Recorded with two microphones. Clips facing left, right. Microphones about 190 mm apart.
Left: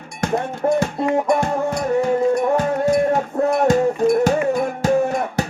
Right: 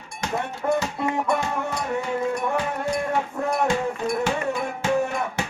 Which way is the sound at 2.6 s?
45° left (ahead or behind).